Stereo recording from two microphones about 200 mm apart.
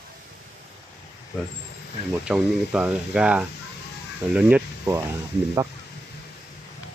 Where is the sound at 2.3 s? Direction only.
5° right (ahead or behind).